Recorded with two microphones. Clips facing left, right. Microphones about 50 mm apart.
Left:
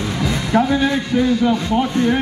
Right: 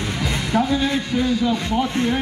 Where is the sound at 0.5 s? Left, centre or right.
Left.